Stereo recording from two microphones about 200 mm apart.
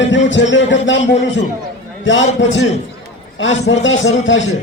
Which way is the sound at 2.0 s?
65° left (ahead or behind).